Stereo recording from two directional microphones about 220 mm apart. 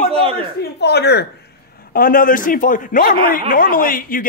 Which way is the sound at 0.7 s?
50° left (ahead or behind).